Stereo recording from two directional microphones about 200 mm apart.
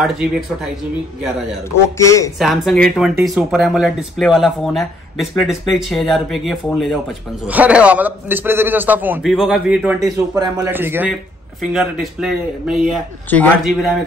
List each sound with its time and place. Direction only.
2.0 s speech: 15° left (ahead or behind)
2.3 s a man's voice: centre (ahead or behind)
10.1 s a man's voice: 15° right (ahead or behind); by 13.9 s 5° left (ahead or behind)